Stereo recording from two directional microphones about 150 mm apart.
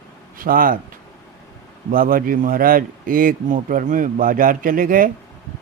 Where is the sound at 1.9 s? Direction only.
70° right (ahead or behind).